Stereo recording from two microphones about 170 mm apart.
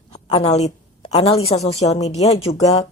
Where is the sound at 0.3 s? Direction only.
35° left (ahead or behind).